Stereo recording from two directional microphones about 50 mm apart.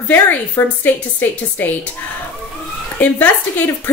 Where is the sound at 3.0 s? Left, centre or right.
Left.